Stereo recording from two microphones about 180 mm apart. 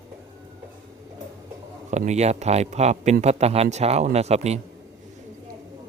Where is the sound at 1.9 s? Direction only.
40° right (ahead or behind).